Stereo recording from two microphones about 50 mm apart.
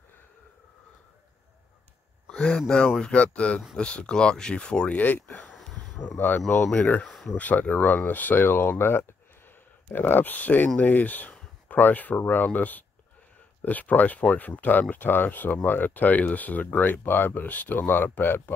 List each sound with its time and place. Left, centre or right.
2.2 s speech: centre
4.9 s speech: left
5.4 s a sound: centre
6.1 s speech: left
6.8 s speech: left
7.1 s a sound: centre
7.3 s speech: left
8.4 s speech: left